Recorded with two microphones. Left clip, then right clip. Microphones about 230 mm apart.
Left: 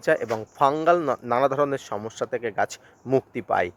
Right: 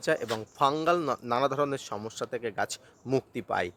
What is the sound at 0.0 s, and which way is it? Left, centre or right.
A man's voice, centre.